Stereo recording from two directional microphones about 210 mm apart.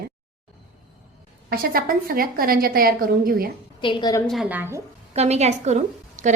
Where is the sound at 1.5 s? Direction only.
45° right (ahead or behind).